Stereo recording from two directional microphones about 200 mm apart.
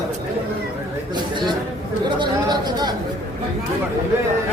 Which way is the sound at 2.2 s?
20° right (ahead or behind).